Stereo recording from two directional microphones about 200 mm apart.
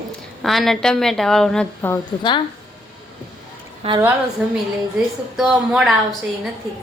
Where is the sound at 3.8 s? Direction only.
30° right (ahead or behind).